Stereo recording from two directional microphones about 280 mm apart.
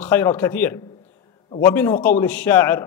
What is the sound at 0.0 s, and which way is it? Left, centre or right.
A man's voice, centre.